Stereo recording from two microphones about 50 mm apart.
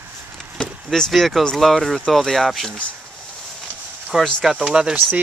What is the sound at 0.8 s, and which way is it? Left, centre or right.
Speech, centre.